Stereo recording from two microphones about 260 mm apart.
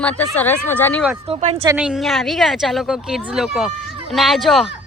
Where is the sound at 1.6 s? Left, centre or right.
Centre.